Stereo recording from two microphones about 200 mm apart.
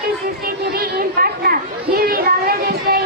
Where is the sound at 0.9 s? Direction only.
50° right (ahead or behind).